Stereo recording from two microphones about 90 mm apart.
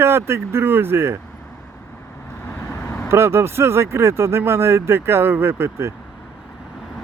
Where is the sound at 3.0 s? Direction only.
30° right (ahead or behind).